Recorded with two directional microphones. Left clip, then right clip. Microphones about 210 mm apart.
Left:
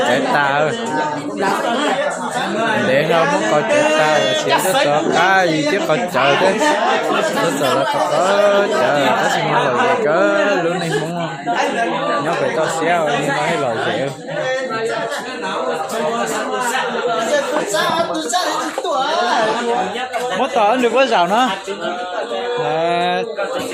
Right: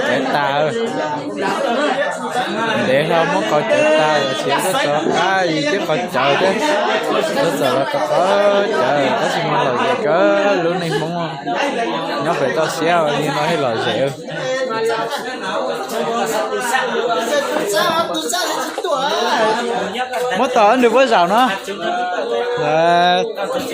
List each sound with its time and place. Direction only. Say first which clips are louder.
0.1 s speech: left 1 dB; centre (ahead or behind)
2.9 s speech: even; 5° right (ahead or behind)
4.9 s a man's voice: left 2 dB; 10° left (ahead or behind)
8.3 s speech: left 2 dB; centre (ahead or behind)
10.1 s speech: right 1 dB; 5° right (ahead or behind)
20.4 s speech: right 3 dB; 20° right (ahead or behind)
22.7 s speech: right 6 dB; 15° right (ahead or behind)